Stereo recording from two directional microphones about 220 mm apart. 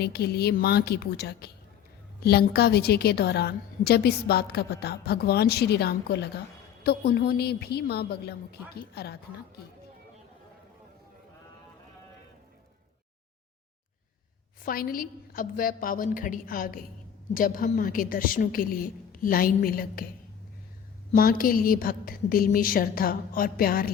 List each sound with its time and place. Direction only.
0.0 s a woman's voice: 45° left (ahead or behind)
14.6 s a woman's voice: 40° left (ahead or behind)
21.1 s a woman's voice: 40° left (ahead or behind)